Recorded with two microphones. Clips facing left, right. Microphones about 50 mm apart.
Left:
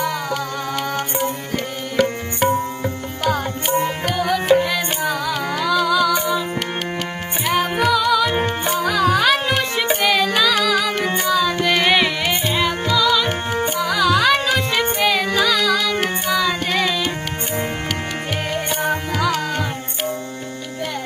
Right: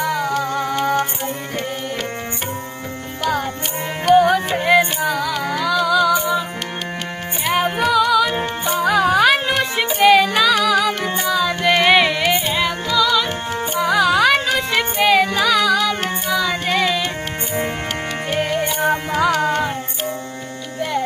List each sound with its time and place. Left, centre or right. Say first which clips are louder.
0.0 s music: right 2 dB; centre
3.2 s music: left 1 dB; centre
4.1 s music: right 11 dB; right
5.0 s music: right 1 dB; centre
7.4 s music: even; centre
8.8 s music: right 3 dB; centre
11.7 s carnatic music: right 4 dB; centre
12.5 s music: even; centre
13.2 s music: left 2 dB; left
13.7 s music: right 4 dB; centre
14.0 s music: even; centre
18.3 s music: right 4 dB; centre
19.1 s music: right 4 dB; right